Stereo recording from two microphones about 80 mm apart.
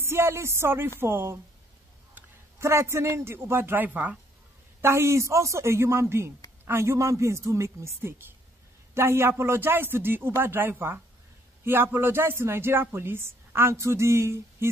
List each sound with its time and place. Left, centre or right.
0.0 s a man's voice: right
2.6 s a man's voice: right
4.8 s a man's voice: right